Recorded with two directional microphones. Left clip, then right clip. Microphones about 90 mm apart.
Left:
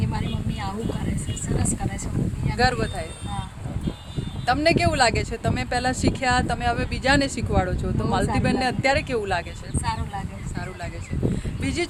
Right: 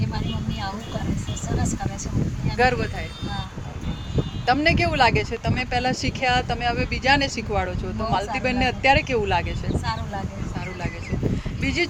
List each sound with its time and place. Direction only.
2.6 s speech: 35° left (ahead or behind)
4.4 s speech: 45° left (ahead or behind)
11.6 s speech: 45° left (ahead or behind)